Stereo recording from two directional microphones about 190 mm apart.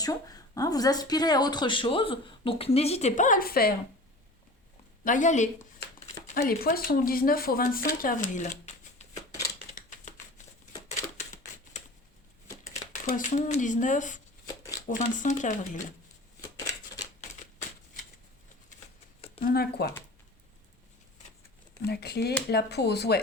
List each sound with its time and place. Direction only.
0.0 s speech: 20° left (ahead or behind); by 3.8 s 50° left (ahead or behind)
5.0 s speech: 40° left (ahead or behind)
6.3 s speech: 50° left (ahead or behind)
12.9 s speech: 40° left (ahead or behind)
14.4 s shuffling cards: 20° left (ahead or behind)
14.8 s speech: 40° left (ahead or behind)
19.4 s speech: 50° left (ahead or behind)
21.8 s speech: 55° left (ahead or behind)